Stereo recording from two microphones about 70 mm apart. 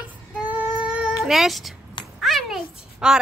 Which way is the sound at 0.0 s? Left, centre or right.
Right.